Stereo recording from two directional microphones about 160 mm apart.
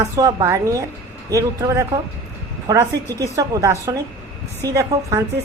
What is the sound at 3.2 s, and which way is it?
A woman's voice, 20° right (ahead or behind).